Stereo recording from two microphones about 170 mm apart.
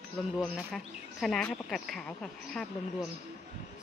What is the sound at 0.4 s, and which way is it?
Speech, centre (ahead or behind).